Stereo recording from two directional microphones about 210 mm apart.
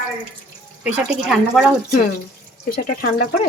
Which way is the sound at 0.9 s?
5° right (ahead or behind).